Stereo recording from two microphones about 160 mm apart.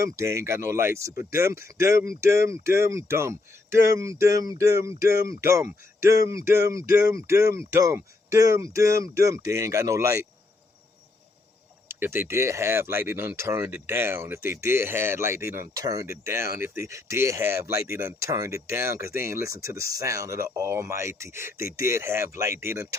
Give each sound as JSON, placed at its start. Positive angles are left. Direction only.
{"t": 0.0, "sound": "speech", "side_deg": -20}
{"t": 11.9, "sound": "speech", "side_deg": -15}